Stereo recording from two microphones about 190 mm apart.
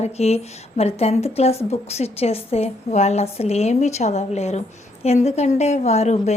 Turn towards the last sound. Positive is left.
turn(degrees=35)  # may be behind; listen again after turning